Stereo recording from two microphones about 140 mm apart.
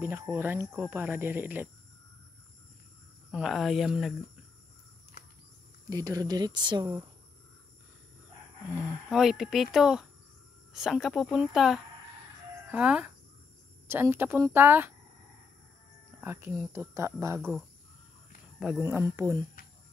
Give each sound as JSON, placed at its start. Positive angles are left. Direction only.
{"t": 0.0, "sound": "speech", "side_deg": -15}
{"t": 3.3, "sound": "speech", "side_deg": -5}
{"t": 5.9, "sound": "speech", "side_deg": -25}
{"t": 9.1, "sound": "speech", "side_deg": -5}
{"t": 16.2, "sound": "speech", "side_deg": -15}
{"t": 17.4, "sound": "speech", "side_deg": 0}
{"t": 18.8, "sound": "speech", "side_deg": -20}